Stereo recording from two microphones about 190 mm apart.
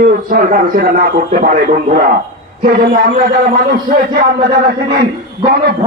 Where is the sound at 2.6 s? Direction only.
50° right (ahead or behind).